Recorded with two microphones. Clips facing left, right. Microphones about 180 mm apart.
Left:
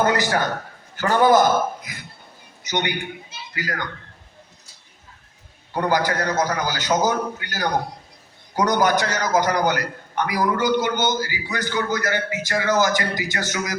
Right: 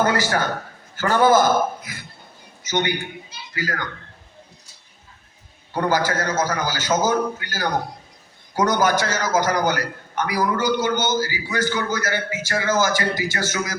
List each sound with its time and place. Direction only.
0.0 s a man's voice: 20° left (ahead or behind)
5.7 s a man's voice: 20° left (ahead or behind)